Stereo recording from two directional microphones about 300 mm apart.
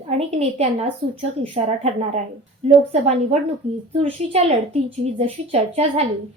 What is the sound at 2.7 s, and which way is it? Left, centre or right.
A woman's voice, right.